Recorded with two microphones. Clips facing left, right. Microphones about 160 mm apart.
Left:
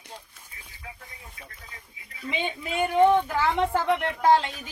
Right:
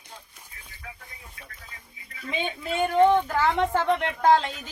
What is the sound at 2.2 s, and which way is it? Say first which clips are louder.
Speech: even; 10° left (ahead or behind).